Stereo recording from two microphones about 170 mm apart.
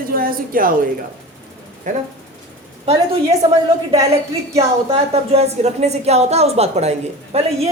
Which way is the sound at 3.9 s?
40° right (ahead or behind).